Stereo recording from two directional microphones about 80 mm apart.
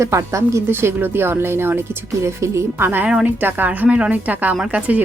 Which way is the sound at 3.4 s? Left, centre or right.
Right.